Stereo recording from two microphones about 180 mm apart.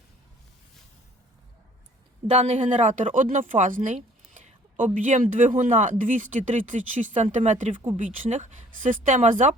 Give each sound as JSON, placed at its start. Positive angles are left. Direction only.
{"t": 2.3, "sound": "speech", "side_deg": -35}